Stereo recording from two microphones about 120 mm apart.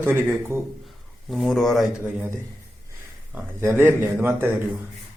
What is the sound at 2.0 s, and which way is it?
Speech, 15° right (ahead or behind).